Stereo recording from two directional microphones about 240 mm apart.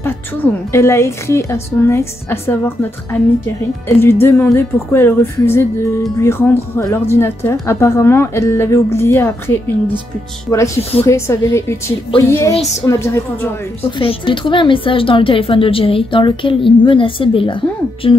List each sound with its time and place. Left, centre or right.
0.0 s speech: centre
10.8 s a woman's voice: left
11.1 s a woman's voice: centre